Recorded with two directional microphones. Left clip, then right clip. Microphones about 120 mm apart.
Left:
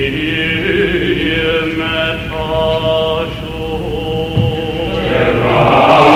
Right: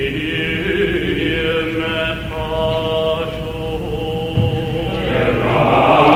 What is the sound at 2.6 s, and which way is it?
Mantra, 35° left (ahead or behind).